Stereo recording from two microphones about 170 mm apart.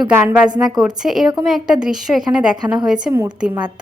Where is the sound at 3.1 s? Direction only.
20° right (ahead or behind).